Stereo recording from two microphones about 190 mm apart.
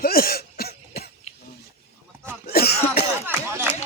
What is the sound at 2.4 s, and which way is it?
Cough, 55° left (ahead or behind).